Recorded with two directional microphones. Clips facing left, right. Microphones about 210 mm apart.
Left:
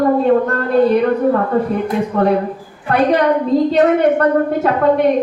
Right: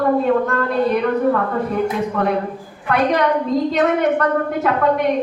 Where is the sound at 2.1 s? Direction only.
30° left (ahead or behind).